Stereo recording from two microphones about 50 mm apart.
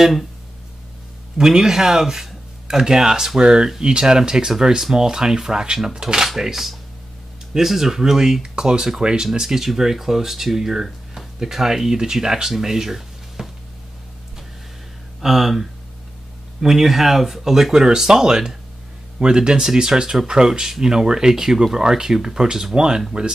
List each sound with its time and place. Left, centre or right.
0.0 s speech: centre
1.4 s speech: centre
6.2 s speech: centre
15.2 s speech: centre